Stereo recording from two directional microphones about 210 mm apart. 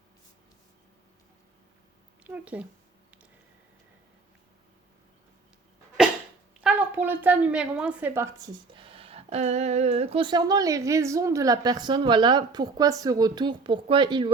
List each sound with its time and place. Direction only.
2.2 s speech: 5° right (ahead or behind)
6.0 s dog: 5° right (ahead or behind)
6.6 s a woman's voice: 5° right (ahead or behind)
8.7 s speech: 25° right (ahead or behind)